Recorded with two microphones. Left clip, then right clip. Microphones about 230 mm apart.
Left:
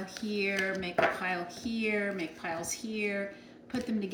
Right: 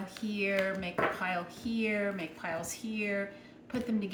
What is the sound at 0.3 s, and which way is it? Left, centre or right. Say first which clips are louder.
A woman's voice: even; centre.